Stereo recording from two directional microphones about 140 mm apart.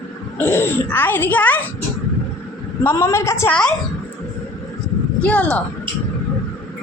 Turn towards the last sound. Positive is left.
turn(degrees=10)  # may be behind; listen again after turning